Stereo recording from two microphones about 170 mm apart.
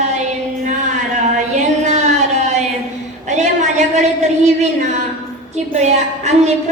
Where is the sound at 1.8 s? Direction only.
45° right (ahead or behind).